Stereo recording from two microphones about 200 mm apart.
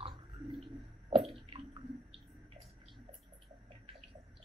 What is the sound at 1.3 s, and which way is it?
Drip, 25° right (ahead or behind).